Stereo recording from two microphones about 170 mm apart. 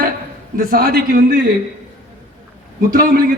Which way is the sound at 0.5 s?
55° right (ahead or behind).